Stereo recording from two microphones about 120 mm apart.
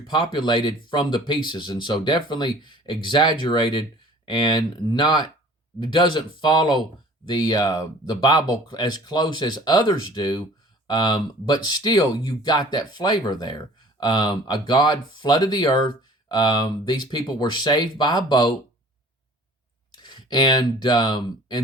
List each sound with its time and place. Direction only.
0.1 s speech: 40° left (ahead or behind)
20.0 s speech: 40° left (ahead or behind)